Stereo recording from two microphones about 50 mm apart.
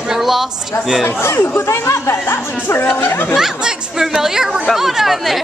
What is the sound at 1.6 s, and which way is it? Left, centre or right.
Speech, left.